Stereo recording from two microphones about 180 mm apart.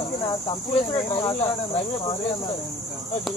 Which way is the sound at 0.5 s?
30° left (ahead or behind).